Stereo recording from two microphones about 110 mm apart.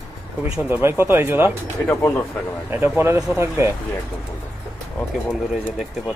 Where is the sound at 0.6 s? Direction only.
20° right (ahead or behind).